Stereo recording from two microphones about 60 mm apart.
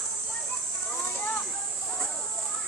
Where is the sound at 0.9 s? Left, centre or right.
Left.